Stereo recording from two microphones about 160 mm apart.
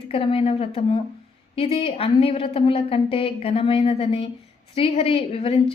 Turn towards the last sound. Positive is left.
turn(degrees=35)  # may be behind; listen again after turning